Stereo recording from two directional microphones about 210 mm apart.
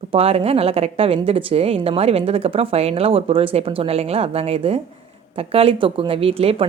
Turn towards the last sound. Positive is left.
turn(degrees=-25)  # may be behind; listen again after turning